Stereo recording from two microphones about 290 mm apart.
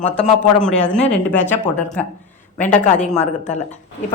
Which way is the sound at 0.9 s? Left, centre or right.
Centre.